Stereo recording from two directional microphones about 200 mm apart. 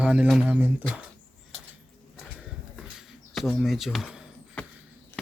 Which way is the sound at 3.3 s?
Centre (ahead or behind).